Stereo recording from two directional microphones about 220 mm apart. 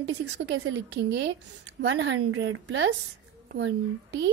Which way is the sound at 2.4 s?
55° right (ahead or behind).